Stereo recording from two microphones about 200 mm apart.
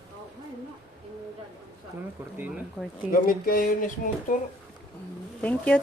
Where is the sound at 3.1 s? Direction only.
45° left (ahead or behind).